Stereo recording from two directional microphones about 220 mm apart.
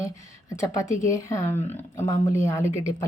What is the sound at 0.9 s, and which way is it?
Speech, 15° left (ahead or behind).